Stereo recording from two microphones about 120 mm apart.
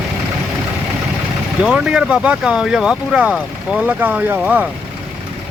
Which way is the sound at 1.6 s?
5° right (ahead or behind).